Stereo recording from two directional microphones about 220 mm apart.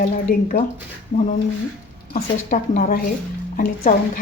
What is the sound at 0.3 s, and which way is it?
Speech, 40° left (ahead or behind).